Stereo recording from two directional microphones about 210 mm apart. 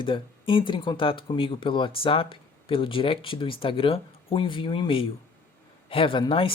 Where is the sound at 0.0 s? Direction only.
25° left (ahead or behind).